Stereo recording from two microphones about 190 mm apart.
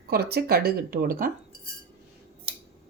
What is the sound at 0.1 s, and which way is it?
Speech, 55° right (ahead or behind).